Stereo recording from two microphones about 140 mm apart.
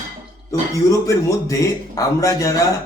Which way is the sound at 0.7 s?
25° left (ahead or behind).